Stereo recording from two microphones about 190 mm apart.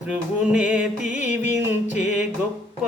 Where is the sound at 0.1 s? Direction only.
5° right (ahead or behind).